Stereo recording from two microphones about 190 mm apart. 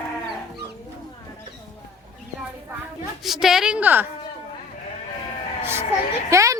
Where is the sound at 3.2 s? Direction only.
Centre (ahead or behind).